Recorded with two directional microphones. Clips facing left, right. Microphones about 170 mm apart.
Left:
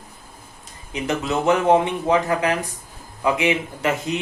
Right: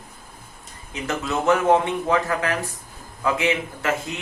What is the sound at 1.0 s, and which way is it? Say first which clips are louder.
Speech: left 2 dB; 20° left (ahead or behind).